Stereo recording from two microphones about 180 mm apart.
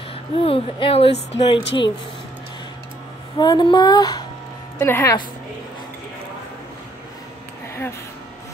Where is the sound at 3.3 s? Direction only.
25° left (ahead or behind).